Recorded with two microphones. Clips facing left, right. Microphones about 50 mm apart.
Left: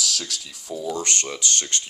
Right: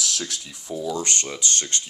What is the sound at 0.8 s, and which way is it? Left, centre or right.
Speech, left.